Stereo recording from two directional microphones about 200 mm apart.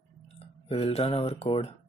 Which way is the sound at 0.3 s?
30° left (ahead or behind).